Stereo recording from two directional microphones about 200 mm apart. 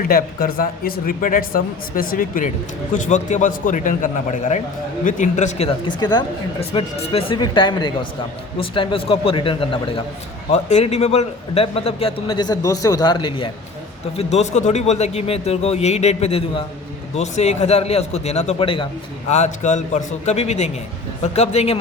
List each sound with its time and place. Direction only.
0.1 s a man's voice: 45° left (ahead or behind)